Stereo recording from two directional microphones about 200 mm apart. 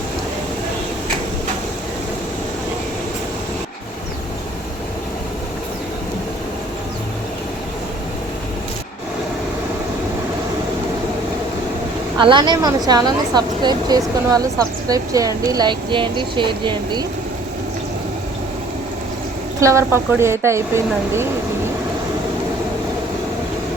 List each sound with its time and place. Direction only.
12.1 s a woman's voice: 20° right (ahead or behind)
19.5 s speech: 15° right (ahead or behind)